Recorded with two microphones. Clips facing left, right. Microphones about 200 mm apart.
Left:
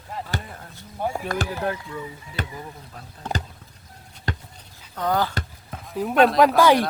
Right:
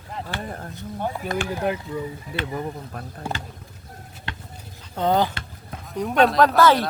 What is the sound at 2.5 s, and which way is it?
Speech, 55° right (ahead or behind).